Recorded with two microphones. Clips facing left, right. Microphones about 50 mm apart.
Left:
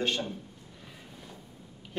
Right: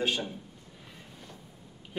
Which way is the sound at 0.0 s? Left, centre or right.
Centre.